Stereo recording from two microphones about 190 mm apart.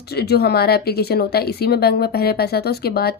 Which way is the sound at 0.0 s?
55° left (ahead or behind).